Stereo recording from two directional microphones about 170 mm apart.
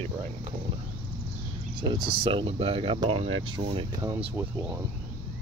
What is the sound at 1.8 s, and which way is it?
Speech, 25° right (ahead or behind).